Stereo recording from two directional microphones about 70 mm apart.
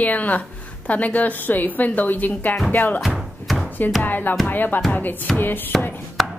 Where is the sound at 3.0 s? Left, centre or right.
Centre.